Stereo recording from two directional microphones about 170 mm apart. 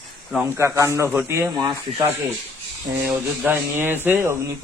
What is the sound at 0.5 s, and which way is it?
Speech, 15° right (ahead or behind).